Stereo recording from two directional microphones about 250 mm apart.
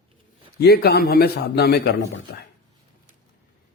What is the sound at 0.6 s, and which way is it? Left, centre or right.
A man's voice, left.